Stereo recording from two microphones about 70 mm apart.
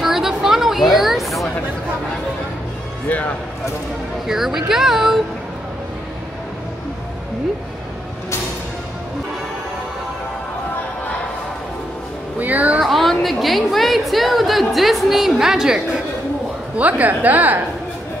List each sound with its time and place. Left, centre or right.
0.0 s a sound: centre
3.1 s speech: left
4.3 s speech: centre
12.4 s music: right
12.8 s a woman's voice: centre
16.7 s a woman's voice: right